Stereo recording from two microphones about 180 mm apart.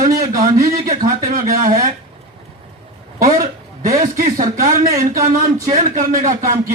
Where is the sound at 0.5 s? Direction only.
50° right (ahead or behind).